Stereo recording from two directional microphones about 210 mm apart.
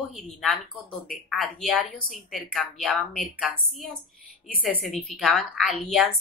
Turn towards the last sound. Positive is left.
turn(degrees=0)  # may be behind; listen again after turning